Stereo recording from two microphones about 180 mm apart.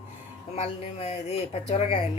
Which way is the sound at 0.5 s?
35° left (ahead or behind).